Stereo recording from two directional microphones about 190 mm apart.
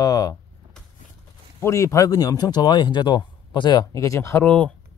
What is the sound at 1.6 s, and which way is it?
Speech, 15° left (ahead or behind).